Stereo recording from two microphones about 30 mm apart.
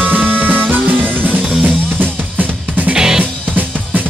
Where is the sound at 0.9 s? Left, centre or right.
Right.